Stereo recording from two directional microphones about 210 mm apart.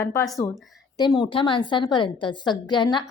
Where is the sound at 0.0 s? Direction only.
10° left (ahead or behind).